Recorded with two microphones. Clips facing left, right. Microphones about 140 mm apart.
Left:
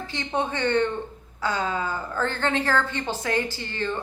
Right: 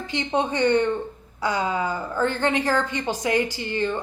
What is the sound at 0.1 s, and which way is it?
A woman's voice, 20° right (ahead or behind).